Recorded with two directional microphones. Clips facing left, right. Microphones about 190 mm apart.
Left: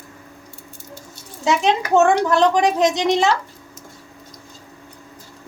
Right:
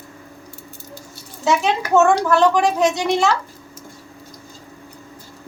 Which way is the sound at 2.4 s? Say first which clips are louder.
Even; 20° left (ahead or behind).